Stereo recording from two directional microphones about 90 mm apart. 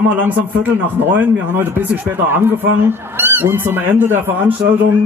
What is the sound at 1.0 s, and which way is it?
A man's voice, 20° right (ahead or behind).